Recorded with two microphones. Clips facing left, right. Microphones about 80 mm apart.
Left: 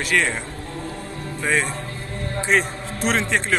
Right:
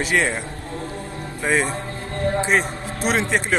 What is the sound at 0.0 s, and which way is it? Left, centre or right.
Speech, centre.